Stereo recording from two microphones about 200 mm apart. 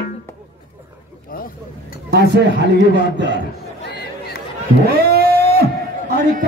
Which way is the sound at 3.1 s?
60° right (ahead or behind).